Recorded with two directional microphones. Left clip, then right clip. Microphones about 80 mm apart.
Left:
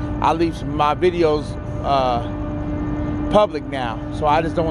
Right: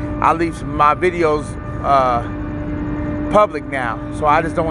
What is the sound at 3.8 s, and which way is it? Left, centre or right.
Speech, left.